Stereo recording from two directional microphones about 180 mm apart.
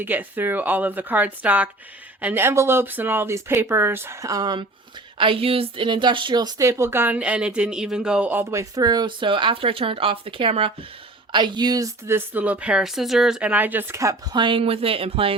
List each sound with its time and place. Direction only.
0.0 s a woman's voice: 10° right (ahead or behind); by 15.4 s 30° right (ahead or behind)